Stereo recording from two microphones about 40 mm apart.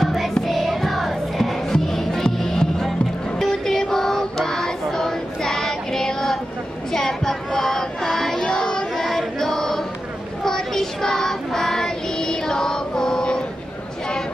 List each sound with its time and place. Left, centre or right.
0.0 s music: centre
3.6 s child singing: centre
8.5 s child singing: centre
9.0 s chant: centre
10.4 s child singing: centre